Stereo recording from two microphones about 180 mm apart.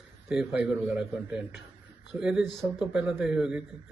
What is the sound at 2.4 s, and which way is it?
Speech, 20° left (ahead or behind).